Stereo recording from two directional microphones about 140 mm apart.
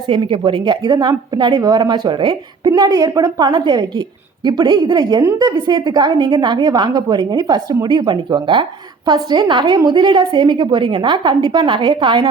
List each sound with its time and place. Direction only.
0.1 s a woman's voice: 35° right (ahead or behind)